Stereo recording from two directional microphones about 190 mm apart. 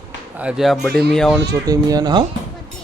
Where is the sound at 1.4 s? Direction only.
20° right (ahead or behind).